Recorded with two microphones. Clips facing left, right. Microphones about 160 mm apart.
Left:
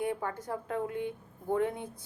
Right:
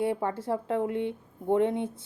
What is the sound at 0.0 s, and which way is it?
Speech, 30° right (ahead or behind).